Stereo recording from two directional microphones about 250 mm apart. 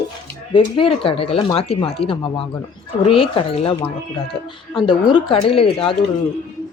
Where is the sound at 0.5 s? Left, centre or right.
Left.